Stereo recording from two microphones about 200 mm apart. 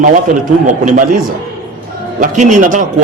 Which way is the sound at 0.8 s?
40° right (ahead or behind).